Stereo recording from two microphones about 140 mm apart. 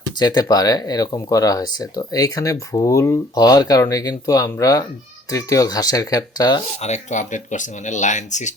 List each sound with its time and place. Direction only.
0.2 s speech: 30° left (ahead or behind)
6.7 s speech: 55° left (ahead or behind)